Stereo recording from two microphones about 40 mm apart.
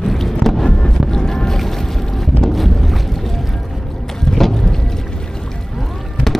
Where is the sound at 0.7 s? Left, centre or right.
Centre.